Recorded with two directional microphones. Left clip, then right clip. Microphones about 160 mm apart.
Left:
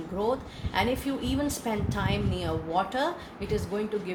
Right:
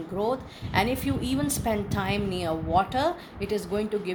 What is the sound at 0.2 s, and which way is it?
A woman's voice, 50° right (ahead or behind).